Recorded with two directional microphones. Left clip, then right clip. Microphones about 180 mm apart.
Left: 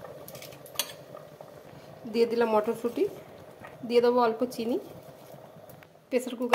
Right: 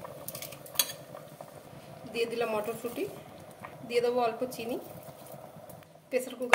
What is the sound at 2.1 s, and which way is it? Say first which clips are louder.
Speech: left 6 dB; 40° left (ahead or behind).